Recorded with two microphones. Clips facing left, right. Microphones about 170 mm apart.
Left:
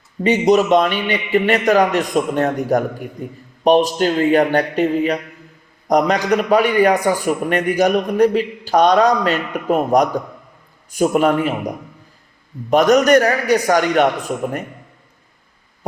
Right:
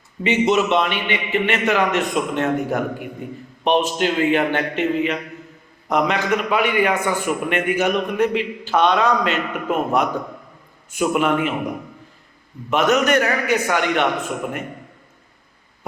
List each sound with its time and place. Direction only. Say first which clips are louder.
0.2 s a man's voice: left 4 dB; 40° left (ahead or behind)
12.7 s a man's voice: left 5 dB; 40° left (ahead or behind)